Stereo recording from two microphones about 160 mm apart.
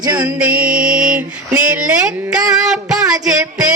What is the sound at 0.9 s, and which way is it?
Female singing, 5° right (ahead or behind).